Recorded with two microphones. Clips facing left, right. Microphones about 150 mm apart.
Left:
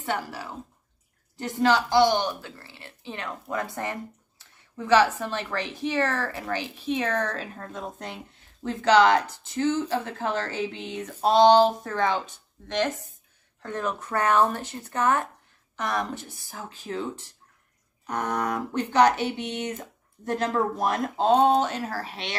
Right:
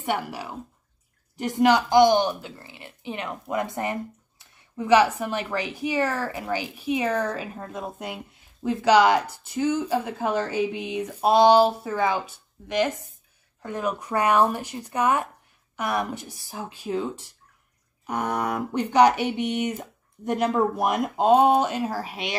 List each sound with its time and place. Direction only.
0.0 s a woman's voice: 15° right (ahead or behind)